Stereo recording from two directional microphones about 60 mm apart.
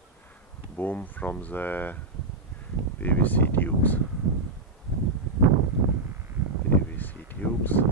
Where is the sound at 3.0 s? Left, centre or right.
Left.